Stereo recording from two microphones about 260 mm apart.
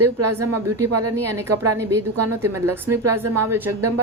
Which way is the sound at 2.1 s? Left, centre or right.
Right.